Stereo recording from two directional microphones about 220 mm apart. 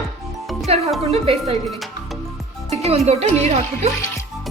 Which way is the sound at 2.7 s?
30° right (ahead or behind).